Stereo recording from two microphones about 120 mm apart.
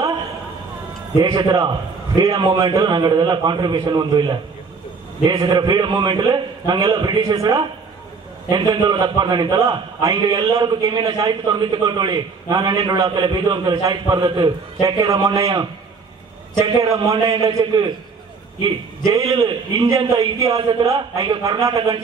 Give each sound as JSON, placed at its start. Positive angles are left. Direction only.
{"t": 1.2, "sound": "a man's voice", "side_deg": -35}